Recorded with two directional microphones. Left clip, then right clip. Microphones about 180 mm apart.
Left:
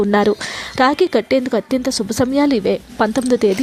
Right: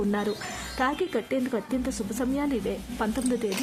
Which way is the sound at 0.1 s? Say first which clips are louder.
Left 14 dB; 45° left (ahead or behind).